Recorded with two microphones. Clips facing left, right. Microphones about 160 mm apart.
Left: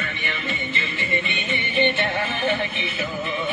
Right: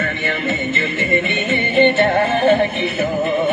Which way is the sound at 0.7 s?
45° right (ahead or behind).